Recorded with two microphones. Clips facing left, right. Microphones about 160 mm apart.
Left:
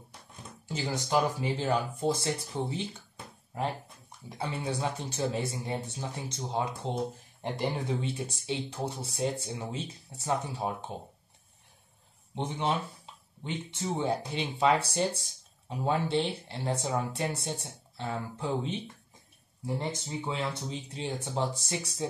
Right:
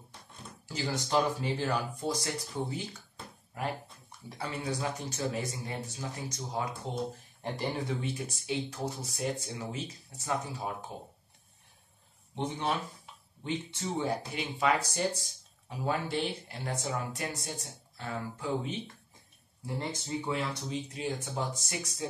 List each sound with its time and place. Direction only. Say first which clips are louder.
0.7 s speech: left 1 dB; 20° left (ahead or behind)
4.3 s speech: left 2 dB; 25° left (ahead or behind)
12.4 s speech: left 2 dB; 20° left (ahead or behind)
14.1 s speech: left 2 dB; 30° left (ahead or behind)